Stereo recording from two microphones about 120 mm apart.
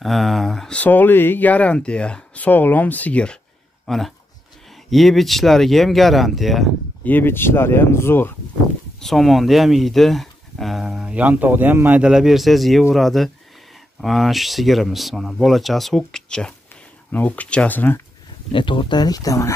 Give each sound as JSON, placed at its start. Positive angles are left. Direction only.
{"t": 0.0, "sound": "speech", "side_deg": 0}
{"t": 7.1, "sound": "speech", "side_deg": 15}
{"t": 9.0, "sound": "speech", "side_deg": 0}
{"t": 12.0, "sound": "speech", "side_deg": -5}
{"t": 18.5, "sound": "speech", "side_deg": 45}